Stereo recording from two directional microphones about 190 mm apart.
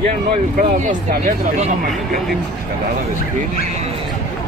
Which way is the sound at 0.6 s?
45° right (ahead or behind).